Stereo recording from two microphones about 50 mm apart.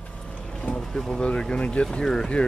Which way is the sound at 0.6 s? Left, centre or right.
Left.